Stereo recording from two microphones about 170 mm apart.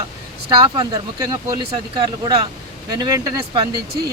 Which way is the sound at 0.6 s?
25° right (ahead or behind).